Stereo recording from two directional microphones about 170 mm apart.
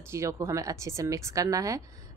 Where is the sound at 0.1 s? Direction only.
15° right (ahead or behind).